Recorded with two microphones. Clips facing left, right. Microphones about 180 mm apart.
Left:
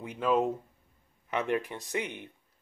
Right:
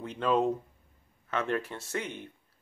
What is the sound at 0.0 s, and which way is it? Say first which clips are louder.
Speech: even; 10° left (ahead or behind).